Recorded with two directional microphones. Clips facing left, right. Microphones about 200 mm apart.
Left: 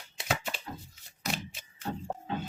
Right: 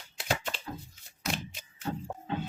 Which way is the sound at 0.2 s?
5° left (ahead or behind).